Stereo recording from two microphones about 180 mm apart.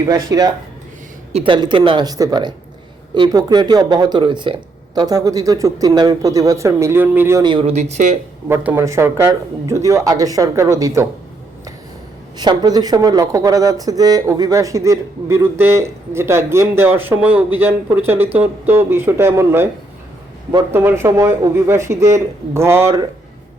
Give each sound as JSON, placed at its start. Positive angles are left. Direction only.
{"t": 0.0, "sound": "speech", "side_deg": -20}
{"t": 1.3, "sound": "speech", "side_deg": -30}
{"t": 8.4, "sound": "speech", "side_deg": -10}
{"t": 12.4, "sound": "speech", "side_deg": -20}
{"t": 20.7, "sound": "speech", "side_deg": -15}